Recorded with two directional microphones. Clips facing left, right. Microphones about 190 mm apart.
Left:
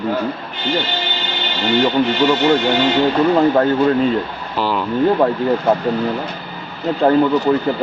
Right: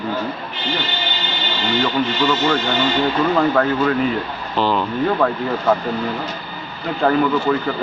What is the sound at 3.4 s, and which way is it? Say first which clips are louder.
Speech: left 3 dB; 25° left (ahead or behind).